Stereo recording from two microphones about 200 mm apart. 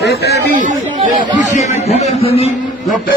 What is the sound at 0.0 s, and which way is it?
Speech, 55° left (ahead or behind).